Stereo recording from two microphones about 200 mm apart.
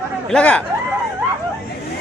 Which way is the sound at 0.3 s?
5° left (ahead or behind).